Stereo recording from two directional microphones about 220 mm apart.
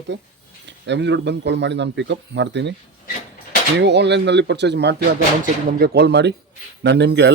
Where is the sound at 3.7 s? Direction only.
50° right (ahead or behind).